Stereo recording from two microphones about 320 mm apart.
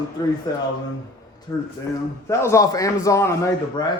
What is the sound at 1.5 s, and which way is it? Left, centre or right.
A man's voice, centre.